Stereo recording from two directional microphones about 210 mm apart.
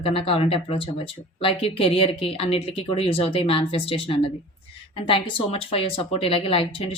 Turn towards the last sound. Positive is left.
turn(degrees=25)  # may be behind; listen again after turning